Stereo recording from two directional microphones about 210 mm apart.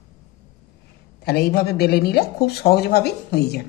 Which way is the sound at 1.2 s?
50° left (ahead or behind).